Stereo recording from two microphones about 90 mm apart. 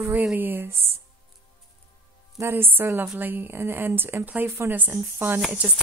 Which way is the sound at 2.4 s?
25° right (ahead or behind).